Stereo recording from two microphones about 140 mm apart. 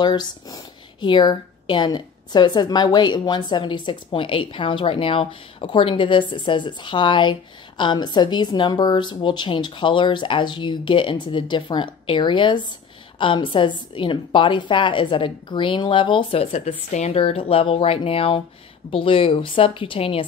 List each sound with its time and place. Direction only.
0.0 s a woman's voice: 30° left (ahead or behind)